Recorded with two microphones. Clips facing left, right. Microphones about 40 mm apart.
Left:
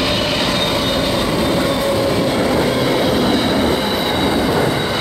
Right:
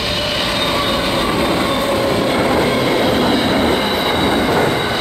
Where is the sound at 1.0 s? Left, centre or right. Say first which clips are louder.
Right 1 dB; right.